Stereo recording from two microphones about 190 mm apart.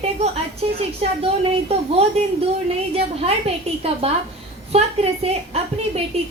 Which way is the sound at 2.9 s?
30° right (ahead or behind).